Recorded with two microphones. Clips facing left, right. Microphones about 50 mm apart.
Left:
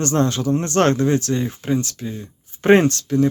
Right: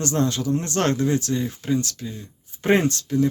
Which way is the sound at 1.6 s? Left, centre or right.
Left.